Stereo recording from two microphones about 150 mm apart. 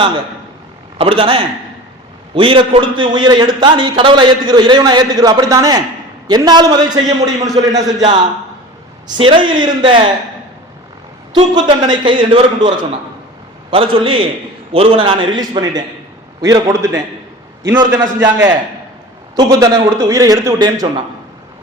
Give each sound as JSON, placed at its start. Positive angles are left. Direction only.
{"t": 0.9, "sound": "a man's voice", "side_deg": -40}
{"t": 11.3, "sound": "a man's voice", "side_deg": -30}
{"t": 16.4, "sound": "a man's voice", "side_deg": -20}